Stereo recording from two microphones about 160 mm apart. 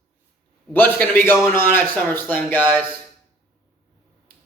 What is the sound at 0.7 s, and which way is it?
A man's voice, 10° left (ahead or behind).